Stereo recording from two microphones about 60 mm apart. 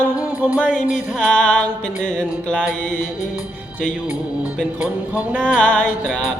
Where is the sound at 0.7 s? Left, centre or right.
Centre.